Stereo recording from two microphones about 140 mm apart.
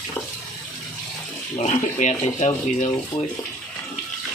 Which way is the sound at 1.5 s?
55° left (ahead or behind).